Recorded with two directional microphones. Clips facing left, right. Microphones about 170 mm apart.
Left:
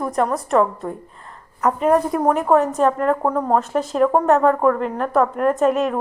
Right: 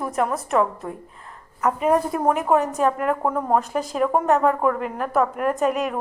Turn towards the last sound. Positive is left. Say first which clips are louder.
# left 4 dB
turn(degrees=0)  # may be behind; listen again after turning